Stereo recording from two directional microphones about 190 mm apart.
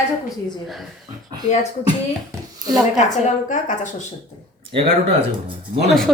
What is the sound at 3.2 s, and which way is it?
Speech, 40° left (ahead or behind).